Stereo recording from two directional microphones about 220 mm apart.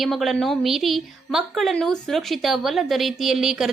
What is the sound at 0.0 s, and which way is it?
A woman's voice, centre (ahead or behind).